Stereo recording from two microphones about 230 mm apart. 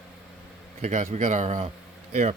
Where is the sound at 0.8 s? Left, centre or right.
Right.